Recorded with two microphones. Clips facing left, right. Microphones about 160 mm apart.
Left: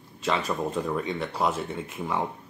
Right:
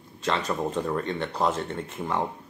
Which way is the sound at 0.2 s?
5° left (ahead or behind).